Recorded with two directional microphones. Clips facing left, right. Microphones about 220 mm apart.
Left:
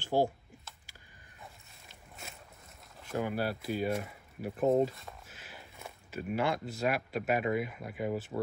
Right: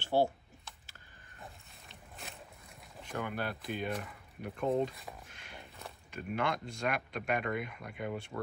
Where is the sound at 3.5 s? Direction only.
5° left (ahead or behind).